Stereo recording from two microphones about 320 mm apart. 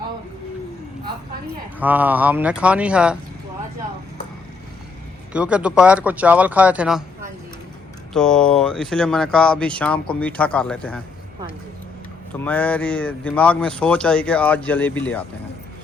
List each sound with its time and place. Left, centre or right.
1.8 s speech: centre
5.3 s speech: centre
12.3 s speech: centre